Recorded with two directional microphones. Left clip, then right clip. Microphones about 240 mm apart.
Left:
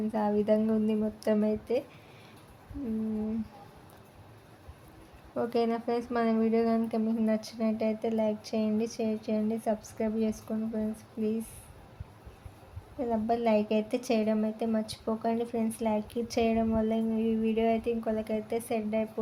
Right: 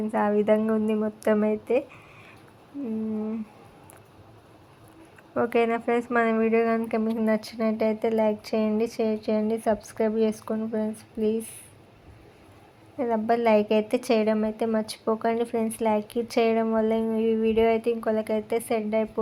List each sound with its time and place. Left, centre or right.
0.1 s speech: centre
5.3 s speech: centre
13.0 s speech: centre